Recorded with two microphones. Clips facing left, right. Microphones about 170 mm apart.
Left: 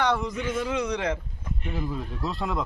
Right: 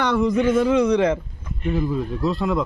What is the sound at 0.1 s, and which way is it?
Speech, 75° right (ahead or behind).